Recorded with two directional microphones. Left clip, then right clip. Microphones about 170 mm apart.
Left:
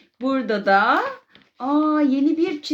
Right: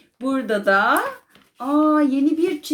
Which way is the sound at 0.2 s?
35° left (ahead or behind).